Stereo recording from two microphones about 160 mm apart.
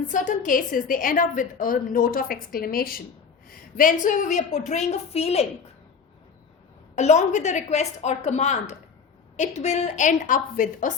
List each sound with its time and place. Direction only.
0.1 s a woman's voice: 50° left (ahead or behind)
6.9 s a woman's voice: 45° left (ahead or behind)